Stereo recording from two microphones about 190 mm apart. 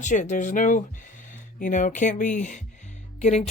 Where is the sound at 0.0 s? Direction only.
40° left (ahead or behind).